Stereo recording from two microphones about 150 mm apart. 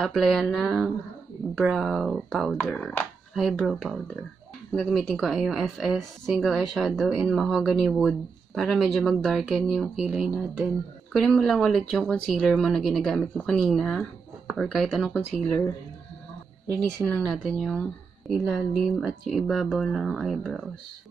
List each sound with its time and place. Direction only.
0.0 s a woman's voice: centre (ahead or behind)
17.0 s a woman's voice: 5° left (ahead or behind)